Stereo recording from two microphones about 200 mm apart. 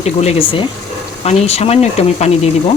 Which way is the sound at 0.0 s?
30° left (ahead or behind).